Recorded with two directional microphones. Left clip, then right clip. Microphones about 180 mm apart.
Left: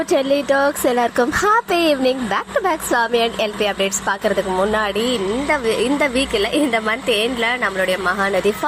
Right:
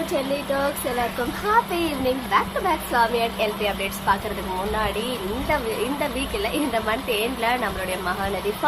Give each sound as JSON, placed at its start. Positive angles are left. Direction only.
{"t": 0.5, "sound": "speech", "side_deg": 40}
{"t": 6.0, "sound": "a woman's voice", "side_deg": 30}